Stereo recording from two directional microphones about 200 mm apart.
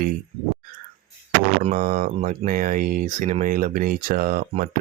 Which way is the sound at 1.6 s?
40° right (ahead or behind).